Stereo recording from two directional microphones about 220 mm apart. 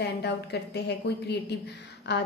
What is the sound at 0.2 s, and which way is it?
A woman's voice, 50° left (ahead or behind).